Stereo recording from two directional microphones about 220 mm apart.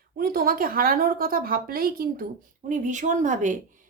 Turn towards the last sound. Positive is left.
turn(degrees=-35)  # may be behind; listen again after turning